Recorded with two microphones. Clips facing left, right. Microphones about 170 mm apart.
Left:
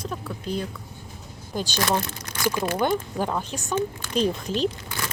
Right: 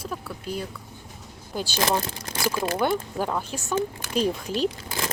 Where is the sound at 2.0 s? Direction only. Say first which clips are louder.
Even; 30° right (ahead or behind).